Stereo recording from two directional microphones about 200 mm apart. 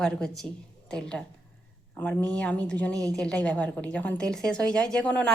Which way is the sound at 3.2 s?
5° left (ahead or behind).